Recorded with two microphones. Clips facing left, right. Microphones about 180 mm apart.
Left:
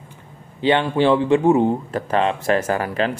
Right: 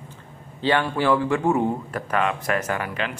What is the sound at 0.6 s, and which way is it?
A man's voice, 20° left (ahead or behind).